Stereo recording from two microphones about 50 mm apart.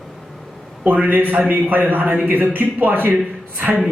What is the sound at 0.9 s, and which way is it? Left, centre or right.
A man's voice, right.